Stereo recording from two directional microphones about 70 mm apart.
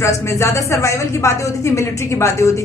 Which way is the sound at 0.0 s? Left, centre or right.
Left.